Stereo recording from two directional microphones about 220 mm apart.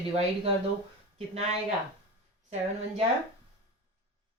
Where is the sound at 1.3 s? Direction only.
30° right (ahead or behind).